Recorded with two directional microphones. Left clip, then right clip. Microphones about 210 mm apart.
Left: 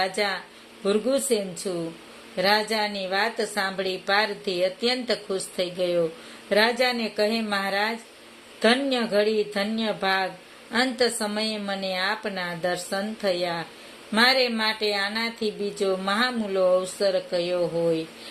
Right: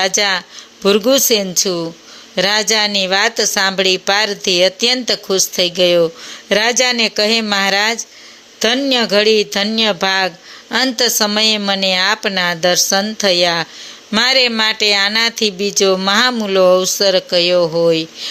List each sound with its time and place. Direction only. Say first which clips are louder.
0.0 s speech: right 11 dB; 35° right (ahead or behind)